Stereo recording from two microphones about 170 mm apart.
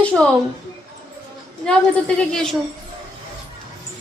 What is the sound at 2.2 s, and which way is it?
Speech, 5° left (ahead or behind).